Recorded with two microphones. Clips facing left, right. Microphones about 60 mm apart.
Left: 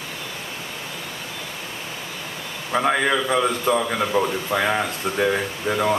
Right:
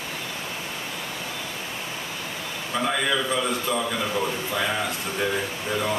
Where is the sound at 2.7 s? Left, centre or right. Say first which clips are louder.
Left 5 dB; left.